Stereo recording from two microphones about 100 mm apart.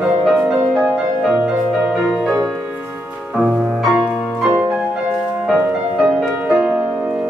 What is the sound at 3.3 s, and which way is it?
Music, 15° right (ahead or behind).